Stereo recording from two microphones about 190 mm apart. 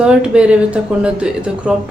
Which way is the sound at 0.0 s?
5° right (ahead or behind).